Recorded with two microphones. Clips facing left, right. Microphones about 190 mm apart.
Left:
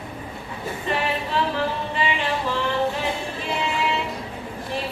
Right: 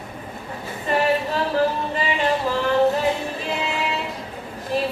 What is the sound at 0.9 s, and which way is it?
Speech, 40° right (ahead or behind).